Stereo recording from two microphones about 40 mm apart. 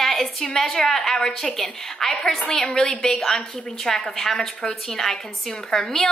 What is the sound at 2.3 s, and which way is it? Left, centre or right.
A woman's voice, centre.